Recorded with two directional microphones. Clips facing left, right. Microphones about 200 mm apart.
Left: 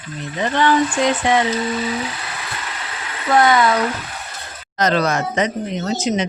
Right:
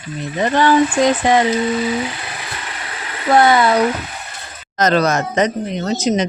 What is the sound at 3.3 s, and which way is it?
Speech, 30° right (ahead or behind).